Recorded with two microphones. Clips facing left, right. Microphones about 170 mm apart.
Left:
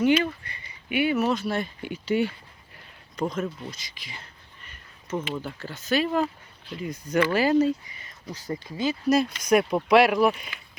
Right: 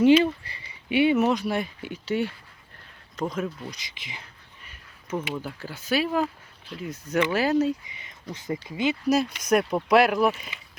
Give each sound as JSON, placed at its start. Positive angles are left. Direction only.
{"t": 0.0, "sound": "speech", "side_deg": -30}
{"t": 1.8, "sound": "speech", "side_deg": 0}
{"t": 2.7, "sound": "a sound", "side_deg": 5}
{"t": 3.7, "sound": "speech", "side_deg": -20}
{"t": 4.6, "sound": "a sound", "side_deg": -10}
{"t": 5.3, "sound": "speech", "side_deg": -5}
{"t": 7.9, "sound": "a sound", "side_deg": -20}
{"t": 8.6, "sound": "speech", "side_deg": -20}
{"t": 9.0, "sound": "speech", "side_deg": -5}